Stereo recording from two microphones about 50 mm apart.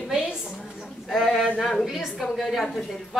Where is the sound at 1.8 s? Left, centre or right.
Centre.